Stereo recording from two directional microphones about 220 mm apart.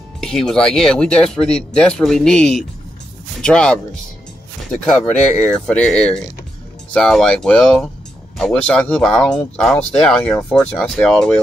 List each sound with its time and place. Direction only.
0.2 s speech: centre (ahead or behind)
4.9 s speech: 35° left (ahead or behind)
5.4 s speech: 5° left (ahead or behind)